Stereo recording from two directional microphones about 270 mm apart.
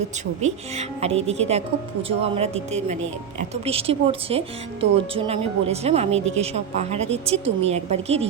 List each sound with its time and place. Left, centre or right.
0.4 s speech: right